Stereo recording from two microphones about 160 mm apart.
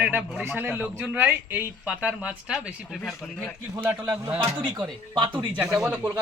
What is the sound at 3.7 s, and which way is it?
A man's voice, 15° right (ahead or behind).